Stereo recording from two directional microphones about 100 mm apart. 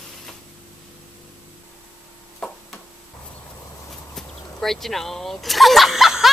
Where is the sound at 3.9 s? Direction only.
5° left (ahead or behind).